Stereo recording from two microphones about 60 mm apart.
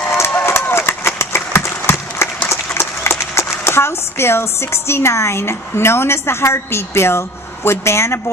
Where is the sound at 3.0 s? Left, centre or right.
Left.